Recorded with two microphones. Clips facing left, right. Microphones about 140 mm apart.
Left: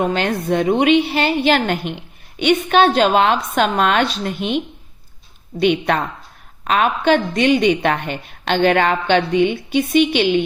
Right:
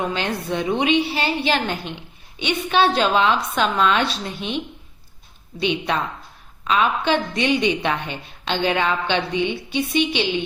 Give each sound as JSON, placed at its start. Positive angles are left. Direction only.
{"t": 0.0, "sound": "a woman's voice", "side_deg": 50}